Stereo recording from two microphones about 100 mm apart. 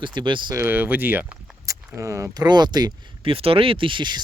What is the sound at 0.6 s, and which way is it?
Speech, 20° right (ahead or behind).